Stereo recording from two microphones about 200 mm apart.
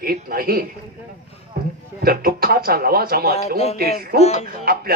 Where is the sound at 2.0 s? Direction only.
50° right (ahead or behind).